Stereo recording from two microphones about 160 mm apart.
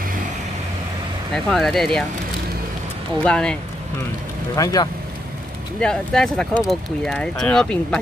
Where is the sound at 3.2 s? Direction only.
5° left (ahead or behind).